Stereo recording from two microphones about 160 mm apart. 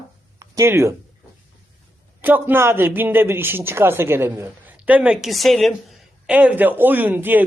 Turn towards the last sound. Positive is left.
turn(degrees=-10)  # may be behind; listen again after turning